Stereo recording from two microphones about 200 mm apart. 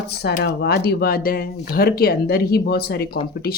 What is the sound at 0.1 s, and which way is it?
Speech, 55° left (ahead or behind).